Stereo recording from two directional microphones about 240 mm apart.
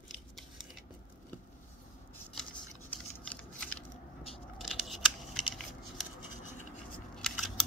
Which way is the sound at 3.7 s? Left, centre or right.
Left.